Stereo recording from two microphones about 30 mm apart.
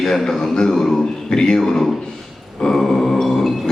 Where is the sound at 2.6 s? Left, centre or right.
Centre.